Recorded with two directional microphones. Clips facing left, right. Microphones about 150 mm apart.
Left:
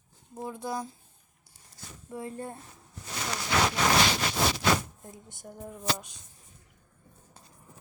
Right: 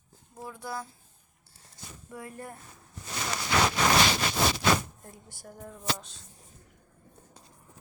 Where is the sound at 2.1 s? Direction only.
25° left (ahead or behind).